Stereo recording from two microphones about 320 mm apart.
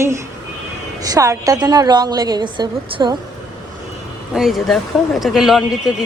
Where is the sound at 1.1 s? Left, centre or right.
Centre.